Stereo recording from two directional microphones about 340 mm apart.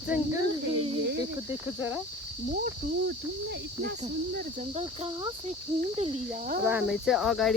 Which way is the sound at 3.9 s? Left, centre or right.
Right.